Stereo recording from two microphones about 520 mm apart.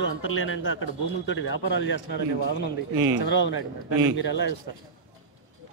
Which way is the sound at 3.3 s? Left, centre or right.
Left.